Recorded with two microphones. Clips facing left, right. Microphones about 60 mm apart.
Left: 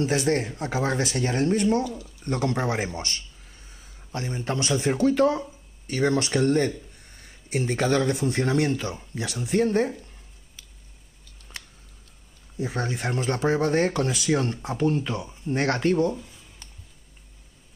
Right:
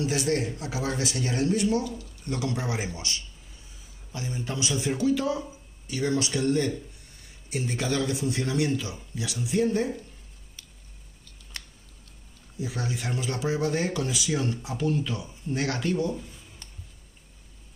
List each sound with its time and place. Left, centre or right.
0.0 s speech: left
12.5 s speech: left
16.2 s a sound: centre